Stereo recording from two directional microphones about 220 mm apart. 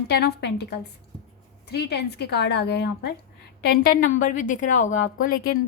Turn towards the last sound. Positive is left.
turn(degrees=40)  # may be behind; listen again after turning